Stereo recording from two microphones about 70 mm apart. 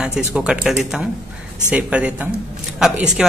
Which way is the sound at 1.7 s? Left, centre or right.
Centre.